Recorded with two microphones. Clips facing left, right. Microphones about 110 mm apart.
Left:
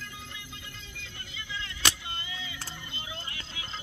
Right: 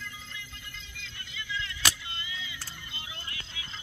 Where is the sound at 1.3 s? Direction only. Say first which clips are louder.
Right 3 dB; 30° left (ahead or behind).